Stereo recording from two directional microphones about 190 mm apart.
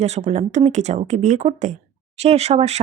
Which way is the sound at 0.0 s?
35° right (ahead or behind).